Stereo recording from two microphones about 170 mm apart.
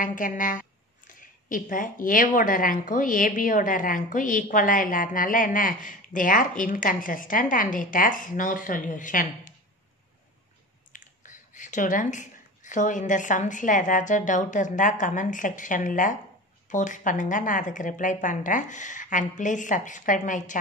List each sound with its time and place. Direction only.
0.0 s a woman's voice: 50° left (ahead or behind)
10.9 s a woman's voice: 50° left (ahead or behind)